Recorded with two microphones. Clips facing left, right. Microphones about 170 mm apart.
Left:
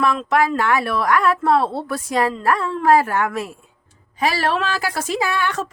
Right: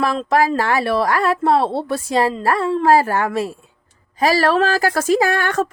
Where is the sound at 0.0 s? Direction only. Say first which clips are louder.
Right 1 dB; 35° right (ahead or behind).